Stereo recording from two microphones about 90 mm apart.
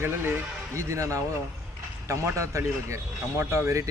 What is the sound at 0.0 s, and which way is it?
Speech, 30° right (ahead or behind).